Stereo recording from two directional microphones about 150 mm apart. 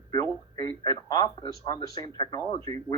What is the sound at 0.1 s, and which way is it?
Speech, 20° left (ahead or behind).